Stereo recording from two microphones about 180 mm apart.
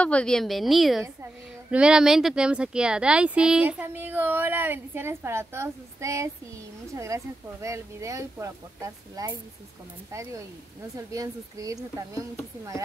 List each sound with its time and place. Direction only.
0.0 s a woman's voice: 5° left (ahead or behind); by 12.8 s 15° right (ahead or behind)